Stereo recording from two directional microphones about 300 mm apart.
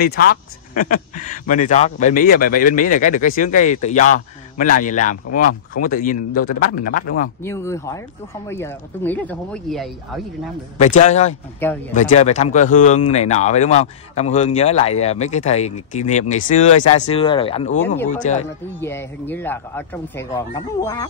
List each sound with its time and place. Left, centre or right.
0.0 s speech: left
7.4 s speech: centre
10.8 s speech: left
18.8 s speech: centre